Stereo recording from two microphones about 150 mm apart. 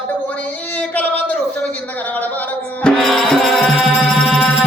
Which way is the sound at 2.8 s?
Centre (ahead or behind).